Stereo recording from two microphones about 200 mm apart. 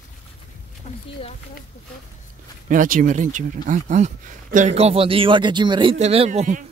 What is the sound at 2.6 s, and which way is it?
Speech, 40° right (ahead or behind).